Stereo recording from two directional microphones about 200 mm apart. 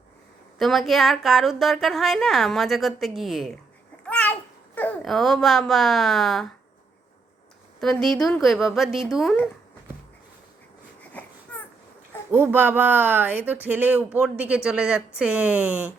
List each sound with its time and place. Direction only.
0.6 s a woman's voice: centre (ahead or behind)
4.0 s babbling: 5° left (ahead or behind)
7.8 s a woman's voice: centre (ahead or behind)
12.3 s a woman's voice: 10° right (ahead or behind)